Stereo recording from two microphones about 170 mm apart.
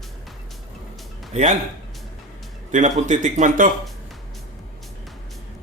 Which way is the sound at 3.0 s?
45° right (ahead or behind).